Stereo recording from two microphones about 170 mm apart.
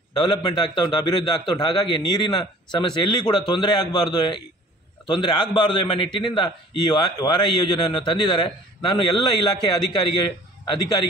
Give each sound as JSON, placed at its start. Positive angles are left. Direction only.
{"t": 0.1, "sound": "a man's voice", "side_deg": 25}